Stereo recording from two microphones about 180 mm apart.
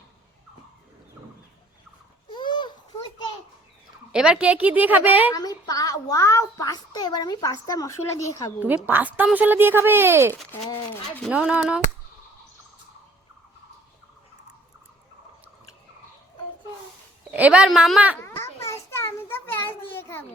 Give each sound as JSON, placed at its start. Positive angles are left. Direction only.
{"t": 2.3, "sound": "a sound", "side_deg": 25}
{"t": 4.1, "sound": "speech", "side_deg": -5}
{"t": 5.3, "sound": "a child's voice", "side_deg": 20}
{"t": 8.6, "sound": "speech", "side_deg": -10}
{"t": 10.9, "sound": "speech", "side_deg": 10}
{"t": 11.3, "sound": "speech", "side_deg": -5}
{"t": 17.3, "sound": "speech", "side_deg": -5}
{"t": 18.2, "sound": "a sound", "side_deg": 15}